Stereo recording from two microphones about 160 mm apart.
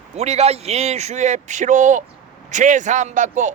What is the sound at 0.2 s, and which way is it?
Speech, 40° right (ahead or behind).